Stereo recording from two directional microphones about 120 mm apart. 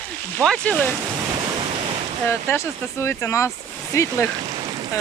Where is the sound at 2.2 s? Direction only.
20° left (ahead or behind).